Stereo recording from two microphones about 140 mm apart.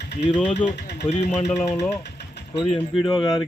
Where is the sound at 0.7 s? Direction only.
45° left (ahead or behind).